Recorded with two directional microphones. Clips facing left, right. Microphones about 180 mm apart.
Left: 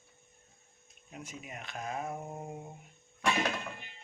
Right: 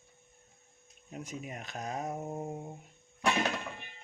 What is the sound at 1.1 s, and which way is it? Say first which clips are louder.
Speech: right 4 dB; 40° right (ahead or behind).